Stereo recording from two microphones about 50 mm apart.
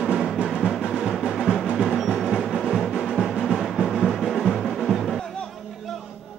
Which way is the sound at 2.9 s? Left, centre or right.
Centre.